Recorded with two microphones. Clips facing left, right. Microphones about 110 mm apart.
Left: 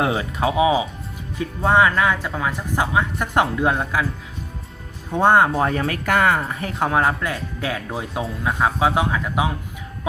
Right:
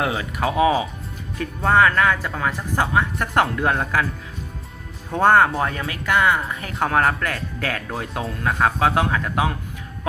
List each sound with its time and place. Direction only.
0.0 s speech: 25° left (ahead or behind)
0.5 s speech: 15° left (ahead or behind)
5.1 s speech: 15° left (ahead or behind)
5.5 s speech: 30° left (ahead or behind)
6.7 s speech: 20° left (ahead or behind)